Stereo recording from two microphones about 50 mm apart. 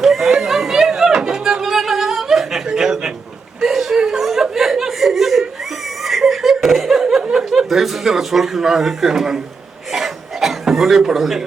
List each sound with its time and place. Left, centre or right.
0.0 s music: centre
2.6 s a sound: centre
3.6 s chuckle: centre
7.2 s a sound: centre
7.7 s speech: centre
9.9 s chuckle: centre